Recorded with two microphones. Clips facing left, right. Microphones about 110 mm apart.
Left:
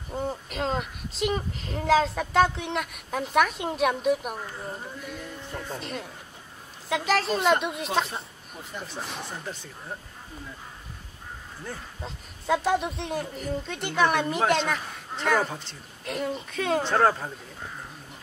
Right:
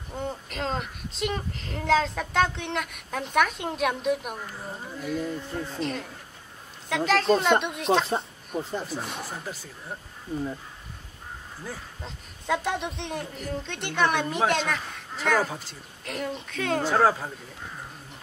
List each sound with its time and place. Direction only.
0.1 s a man's voice: 5° left (ahead or behind)
7.1 s a man's voice: centre (ahead or behind)
8.1 s speech: 35° right (ahead or behind)
8.8 s a man's voice: centre (ahead or behind)
11.6 s a man's voice: centre (ahead or behind)